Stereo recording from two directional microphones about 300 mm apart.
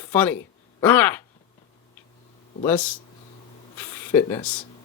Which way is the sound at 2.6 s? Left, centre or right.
Centre.